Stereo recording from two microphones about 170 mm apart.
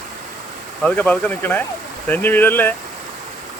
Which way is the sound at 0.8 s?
10° left (ahead or behind).